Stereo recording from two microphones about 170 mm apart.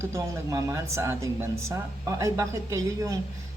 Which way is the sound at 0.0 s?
15° right (ahead or behind).